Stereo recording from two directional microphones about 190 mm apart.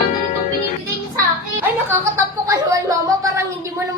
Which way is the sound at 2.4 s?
15° right (ahead or behind).